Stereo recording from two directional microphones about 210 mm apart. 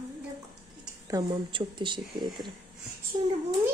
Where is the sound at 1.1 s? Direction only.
20° right (ahead or behind).